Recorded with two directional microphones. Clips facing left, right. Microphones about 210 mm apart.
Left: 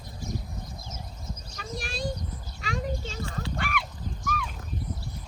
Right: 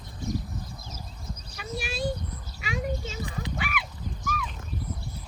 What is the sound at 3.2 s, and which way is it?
Horse, 15° right (ahead or behind).